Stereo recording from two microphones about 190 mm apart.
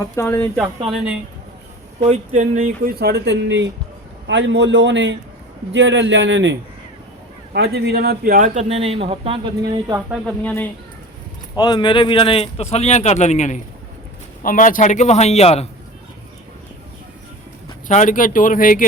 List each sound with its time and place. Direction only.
0.0 s speech: 15° left (ahead or behind)
2.0 s a man's voice: 40° right (ahead or behind); by 6.6 s 75° right (ahead or behind)
7.5 s speech: 60° right (ahead or behind); by 10.0 s 20° right (ahead or behind)
10.1 s speech: 5° left (ahead or behind)
11.5 s speech: 20° left (ahead or behind)
17.8 s speech: 40° left (ahead or behind)